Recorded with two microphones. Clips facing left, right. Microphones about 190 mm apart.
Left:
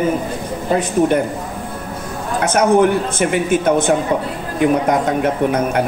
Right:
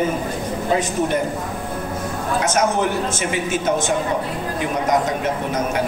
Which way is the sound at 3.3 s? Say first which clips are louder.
Left 6 dB; 55° left (ahead or behind).